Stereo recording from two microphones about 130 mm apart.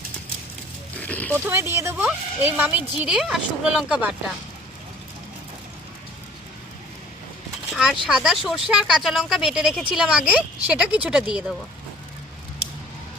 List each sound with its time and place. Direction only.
1.0 s speech: 10° left (ahead or behind)
1.5 s speech: 20° right (ahead or behind)
7.7 s a sound: 5° right (ahead or behind)
8.0 s speech: 5° right (ahead or behind)